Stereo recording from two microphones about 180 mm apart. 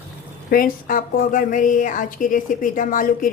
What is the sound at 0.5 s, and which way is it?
A woman's voice, 50° left (ahead or behind).